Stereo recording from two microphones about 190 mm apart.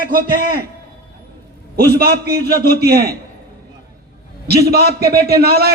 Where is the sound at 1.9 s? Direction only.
55° right (ahead or behind).